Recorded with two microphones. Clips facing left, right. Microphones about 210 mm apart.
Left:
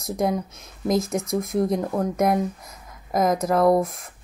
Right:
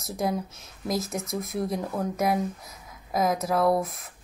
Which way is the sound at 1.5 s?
50° left (ahead or behind).